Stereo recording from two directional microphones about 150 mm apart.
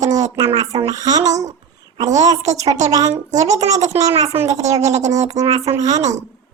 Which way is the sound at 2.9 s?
25° right (ahead or behind).